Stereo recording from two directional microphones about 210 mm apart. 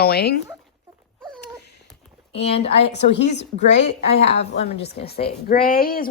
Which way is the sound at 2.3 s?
30° left (ahead or behind).